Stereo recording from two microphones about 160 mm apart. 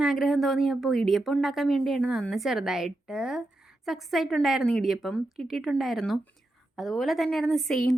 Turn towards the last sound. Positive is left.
turn(degrees=0)  # may be behind; listen again after turning